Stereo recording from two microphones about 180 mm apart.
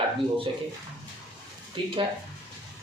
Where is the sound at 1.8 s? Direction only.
30° right (ahead or behind).